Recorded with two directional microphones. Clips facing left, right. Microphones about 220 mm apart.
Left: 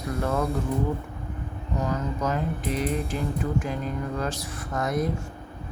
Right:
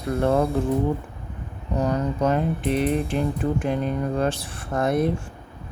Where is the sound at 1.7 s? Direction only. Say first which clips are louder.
Right 5 dB; 35° right (ahead or behind).